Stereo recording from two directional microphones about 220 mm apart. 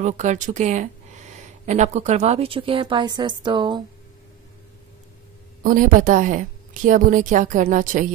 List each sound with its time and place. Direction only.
0.0 s speech: 35° right (ahead or behind)
5.6 s a woman's voice: 40° right (ahead or behind)